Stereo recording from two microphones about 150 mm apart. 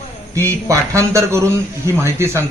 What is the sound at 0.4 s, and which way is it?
A man's voice, 20° right (ahead or behind).